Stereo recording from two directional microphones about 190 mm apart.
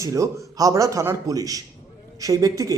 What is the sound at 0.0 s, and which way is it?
A man's voice, 15° right (ahead or behind).